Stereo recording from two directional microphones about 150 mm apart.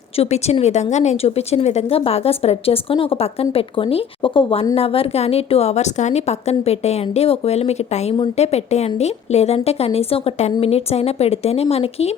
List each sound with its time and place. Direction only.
0.2 s a woman's voice: 45° left (ahead or behind)